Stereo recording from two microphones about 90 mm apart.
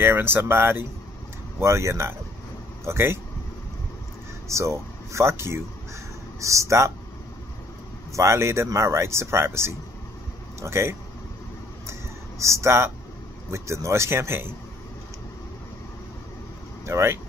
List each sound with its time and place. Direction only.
0.0 s speech: 25° right (ahead or behind)
4.5 s speech: 35° right (ahead or behind)
8.1 s speech: 35° right (ahead or behind)
11.9 s a sound: 35° right (ahead or behind)
13.5 s speech: 30° right (ahead or behind)
16.8 s speech: 30° right (ahead or behind)